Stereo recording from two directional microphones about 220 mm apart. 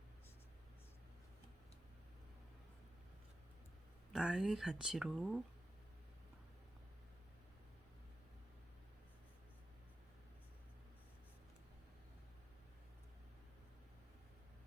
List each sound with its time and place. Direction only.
4.1 s speech: 5° right (ahead or behind)